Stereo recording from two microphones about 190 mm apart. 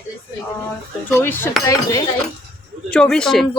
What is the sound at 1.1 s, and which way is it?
Cutlery, 10° left (ahead or behind).